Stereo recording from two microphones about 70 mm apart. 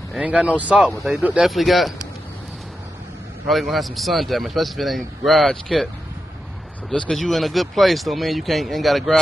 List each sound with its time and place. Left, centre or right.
0.1 s speech: centre
1.4 s a man's voice: centre
3.4 s a man's voice: centre
6.9 s a man's voice: centre